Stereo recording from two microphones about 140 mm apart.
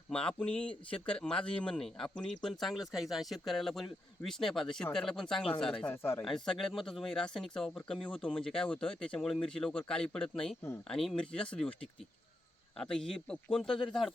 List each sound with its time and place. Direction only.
0.1 s speech: 5° left (ahead or behind)
5.9 s speech: 20° left (ahead or behind)
6.2 s speech: 5° left (ahead or behind)
12.8 s speech: 5° left (ahead or behind)